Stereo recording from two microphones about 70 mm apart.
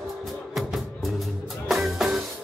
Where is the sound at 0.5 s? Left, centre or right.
Centre.